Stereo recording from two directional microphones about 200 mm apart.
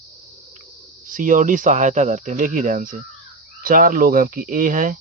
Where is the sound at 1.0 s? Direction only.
40° right (ahead or behind).